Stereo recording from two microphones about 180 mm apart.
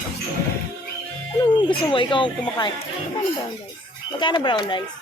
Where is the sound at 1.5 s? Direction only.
25° left (ahead or behind).